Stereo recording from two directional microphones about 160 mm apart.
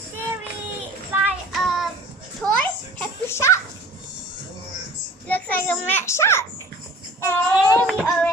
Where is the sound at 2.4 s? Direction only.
10° left (ahead or behind).